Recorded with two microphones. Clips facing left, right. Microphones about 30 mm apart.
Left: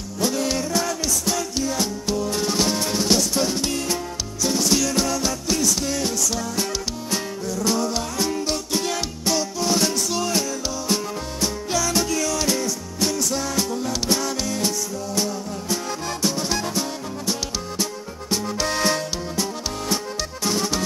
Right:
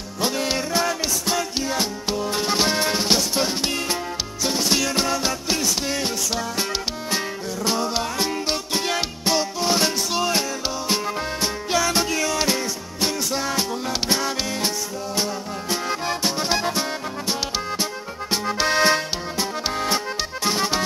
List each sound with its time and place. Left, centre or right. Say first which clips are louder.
0.2 s music: even; right
7.6 s music: right 1 dB; right
11.4 s music: right 1 dB; right
18.3 s music: right 3 dB; right
20.4 s music: right 1 dB; right